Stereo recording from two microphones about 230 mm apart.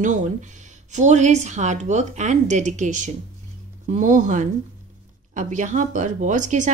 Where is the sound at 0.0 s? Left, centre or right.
Right.